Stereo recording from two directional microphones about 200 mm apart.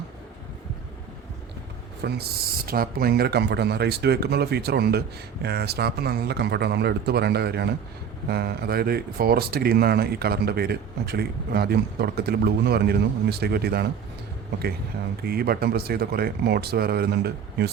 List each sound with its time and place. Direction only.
2.0 s speech: 50° right (ahead or behind)
15.2 s speech: 50° right (ahead or behind)